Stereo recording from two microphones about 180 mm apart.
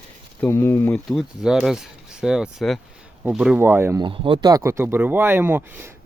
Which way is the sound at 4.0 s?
30° right (ahead or behind).